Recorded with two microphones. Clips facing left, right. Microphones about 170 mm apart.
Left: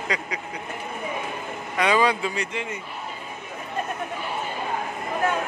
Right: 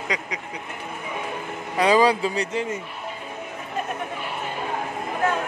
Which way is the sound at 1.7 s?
35° right (ahead or behind).